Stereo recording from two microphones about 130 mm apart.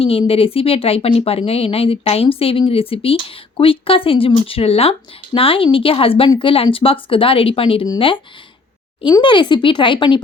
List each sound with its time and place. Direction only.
0.0 s speech: 45° left (ahead or behind)
9.2 s speech: 35° left (ahead or behind)